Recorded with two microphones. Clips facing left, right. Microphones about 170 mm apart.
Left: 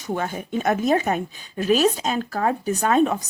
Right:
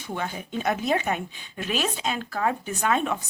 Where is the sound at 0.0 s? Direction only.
45° left (ahead or behind).